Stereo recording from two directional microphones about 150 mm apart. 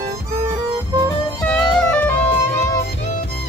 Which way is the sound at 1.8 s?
10° left (ahead or behind).